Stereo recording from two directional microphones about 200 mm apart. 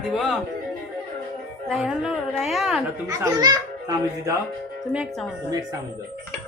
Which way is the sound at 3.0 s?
20° right (ahead or behind).